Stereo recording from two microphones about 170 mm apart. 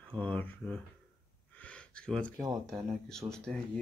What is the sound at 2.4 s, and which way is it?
Speech, 20° right (ahead or behind).